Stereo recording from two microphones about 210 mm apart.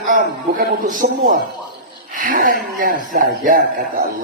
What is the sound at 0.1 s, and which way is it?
A man's voice, 40° right (ahead or behind).